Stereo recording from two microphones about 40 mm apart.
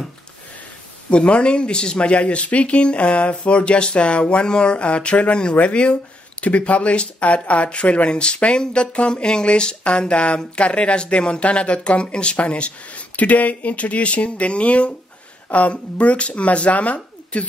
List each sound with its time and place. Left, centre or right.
1.1 s speech: left